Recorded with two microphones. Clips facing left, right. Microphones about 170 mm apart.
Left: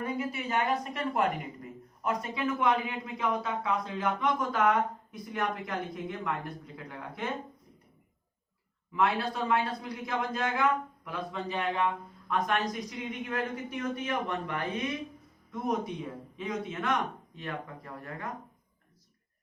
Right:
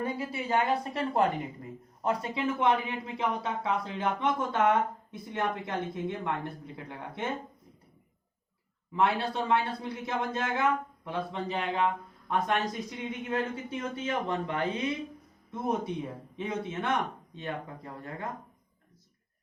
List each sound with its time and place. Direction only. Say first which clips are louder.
0.0 s a woman's voice: even; 30° right (ahead or behind)
8.9 s a woman's voice: right 1 dB; 25° right (ahead or behind)